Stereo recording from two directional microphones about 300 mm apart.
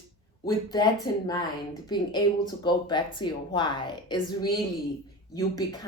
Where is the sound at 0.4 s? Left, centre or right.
Centre.